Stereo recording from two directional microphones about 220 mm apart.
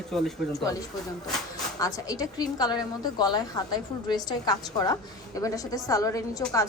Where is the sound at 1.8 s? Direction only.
15° left (ahead or behind).